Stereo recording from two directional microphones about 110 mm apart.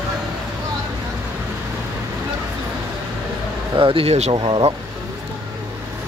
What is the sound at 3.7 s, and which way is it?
Speech, 50° right (ahead or behind).